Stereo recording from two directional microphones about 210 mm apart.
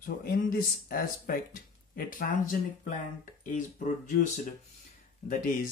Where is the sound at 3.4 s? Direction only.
40° left (ahead or behind).